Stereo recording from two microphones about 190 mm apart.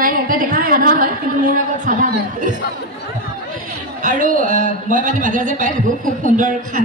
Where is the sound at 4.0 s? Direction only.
45° right (ahead or behind).